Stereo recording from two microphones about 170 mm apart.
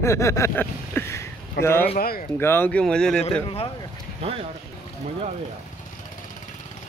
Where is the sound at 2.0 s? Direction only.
60° left (ahead or behind).